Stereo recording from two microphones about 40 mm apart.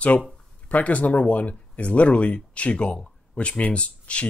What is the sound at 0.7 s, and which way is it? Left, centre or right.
Speech, left.